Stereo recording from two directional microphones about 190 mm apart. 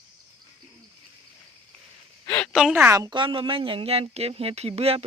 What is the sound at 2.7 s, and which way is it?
Speech, 15° right (ahead or behind).